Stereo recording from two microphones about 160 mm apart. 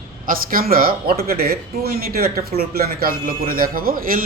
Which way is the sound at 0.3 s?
65° right (ahead or behind).